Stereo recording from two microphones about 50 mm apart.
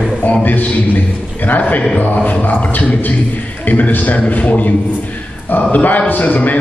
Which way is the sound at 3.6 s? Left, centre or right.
Left.